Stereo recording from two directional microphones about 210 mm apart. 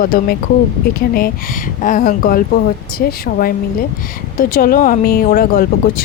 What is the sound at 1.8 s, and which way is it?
A woman's voice, 40° left (ahead or behind).